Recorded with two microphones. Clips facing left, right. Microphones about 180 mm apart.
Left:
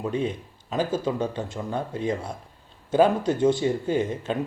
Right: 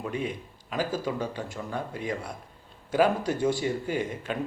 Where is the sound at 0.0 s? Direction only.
25° left (ahead or behind).